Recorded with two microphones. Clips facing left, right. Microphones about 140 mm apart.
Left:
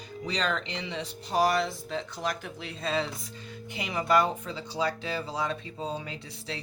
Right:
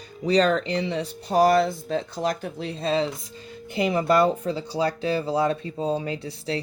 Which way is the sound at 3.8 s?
45° right (ahead or behind).